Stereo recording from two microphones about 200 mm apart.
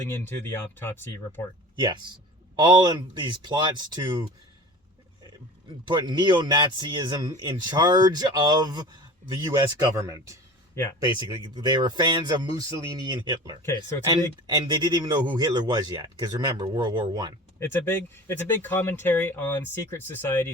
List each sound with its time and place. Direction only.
0.0 s speech: 10° left (ahead or behind)
1.8 s speech: 20° right (ahead or behind)
11.2 s speech: 20° right (ahead or behind)
13.6 s speech: 15° left (ahead or behind)
14.1 s speech: 20° right (ahead or behind)
17.6 s speech: 10° left (ahead or behind)